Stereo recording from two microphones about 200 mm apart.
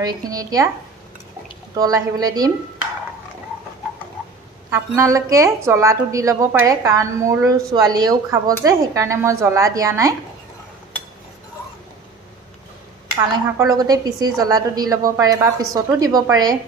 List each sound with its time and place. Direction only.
0.0 s a woman's voice: 20° right (ahead or behind)
1.8 s a woman's voice: 15° right (ahead or behind)
4.6 s a woman's voice: 15° right (ahead or behind)
13.5 s a woman's voice: 15° right (ahead or behind)